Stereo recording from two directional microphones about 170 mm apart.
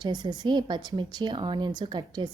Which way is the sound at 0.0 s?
25° right (ahead or behind).